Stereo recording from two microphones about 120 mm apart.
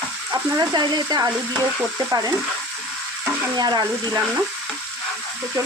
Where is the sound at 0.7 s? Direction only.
35° right (ahead or behind).